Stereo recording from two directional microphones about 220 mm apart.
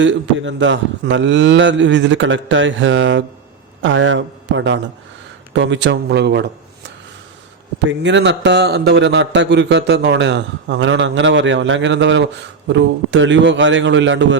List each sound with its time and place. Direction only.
0.0 s a man's voice: 55° right (ahead or behind)
7.9 s a man's voice: 55° right (ahead or behind)